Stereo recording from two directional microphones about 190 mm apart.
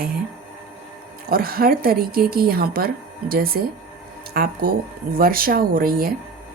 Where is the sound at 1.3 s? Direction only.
50° right (ahead or behind).